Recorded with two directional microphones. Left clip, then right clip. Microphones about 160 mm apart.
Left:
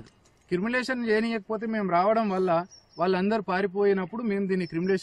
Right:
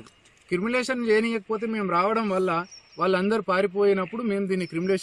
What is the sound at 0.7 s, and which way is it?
Speech, 40° left (ahead or behind).